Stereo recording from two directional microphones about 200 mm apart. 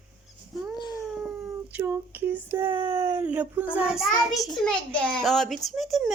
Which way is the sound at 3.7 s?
5° right (ahead or behind).